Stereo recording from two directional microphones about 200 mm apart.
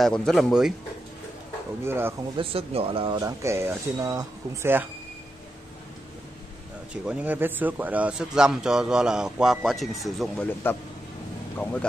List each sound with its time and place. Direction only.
0.0 s a man's voice: 5° left (ahead or behind)
1.9 s speech: 10° right (ahead or behind)
2.3 s speech: 30° right (ahead or behind)
3.2 s speech: 15° right (ahead or behind)
6.9 s a man's voice: 5° right (ahead or behind)